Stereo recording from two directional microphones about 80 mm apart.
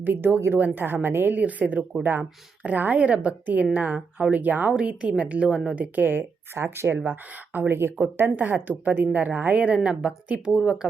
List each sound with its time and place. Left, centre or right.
0.0 s a woman's voice: right; by 10.8 s centre